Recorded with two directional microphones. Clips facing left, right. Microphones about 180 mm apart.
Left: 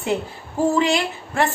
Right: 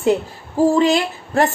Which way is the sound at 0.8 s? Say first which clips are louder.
Right 4 dB; 40° right (ahead or behind).